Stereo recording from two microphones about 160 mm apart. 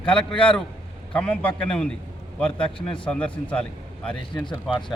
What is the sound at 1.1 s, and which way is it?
A man's voice, 5° left (ahead or behind).